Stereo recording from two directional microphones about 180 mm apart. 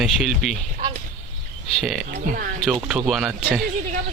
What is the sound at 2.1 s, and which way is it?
Speech, 50° right (ahead or behind).